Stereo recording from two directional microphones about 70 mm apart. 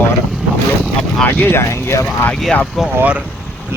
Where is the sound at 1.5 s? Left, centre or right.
Left.